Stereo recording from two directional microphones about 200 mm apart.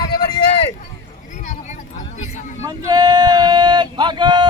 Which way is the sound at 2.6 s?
20° right (ahead or behind).